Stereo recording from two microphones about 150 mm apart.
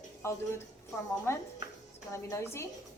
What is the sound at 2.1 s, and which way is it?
Speech, 20° left (ahead or behind).